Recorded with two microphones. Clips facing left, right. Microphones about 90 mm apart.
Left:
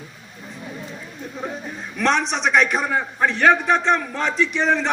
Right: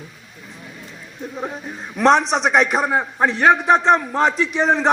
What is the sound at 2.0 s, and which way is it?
A man's voice, 30° right (ahead or behind).